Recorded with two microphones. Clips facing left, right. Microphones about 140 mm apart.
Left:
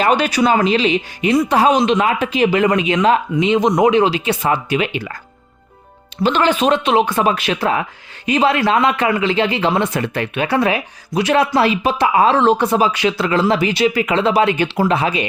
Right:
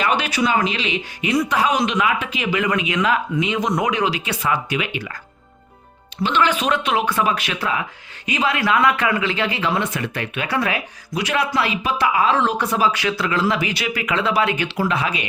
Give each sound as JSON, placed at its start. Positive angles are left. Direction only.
{"t": 0.0, "sound": "speech", "side_deg": 40}
{"t": 6.2, "sound": "speech", "side_deg": 35}